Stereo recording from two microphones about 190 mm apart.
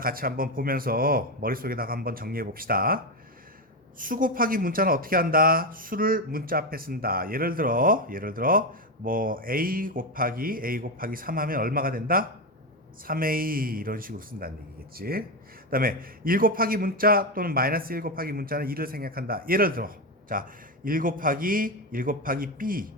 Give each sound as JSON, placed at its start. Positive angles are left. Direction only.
{"t": 0.0, "sound": "a man's voice", "side_deg": -50}